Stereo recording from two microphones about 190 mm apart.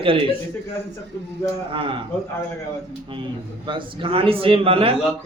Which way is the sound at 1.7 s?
25° right (ahead or behind).